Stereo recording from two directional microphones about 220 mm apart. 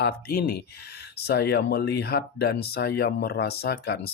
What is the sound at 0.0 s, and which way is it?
Speech, 45° left (ahead or behind).